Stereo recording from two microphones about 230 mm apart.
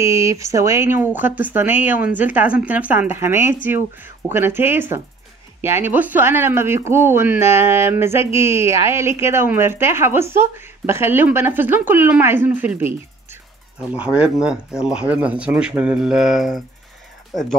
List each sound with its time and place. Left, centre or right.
0.0 s speech: centre